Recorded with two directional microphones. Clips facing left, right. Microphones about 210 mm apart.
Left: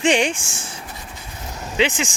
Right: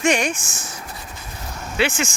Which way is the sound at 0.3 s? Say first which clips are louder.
Even; 30° left (ahead or behind).